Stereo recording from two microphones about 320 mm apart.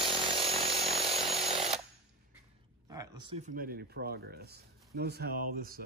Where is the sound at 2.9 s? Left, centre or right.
Centre.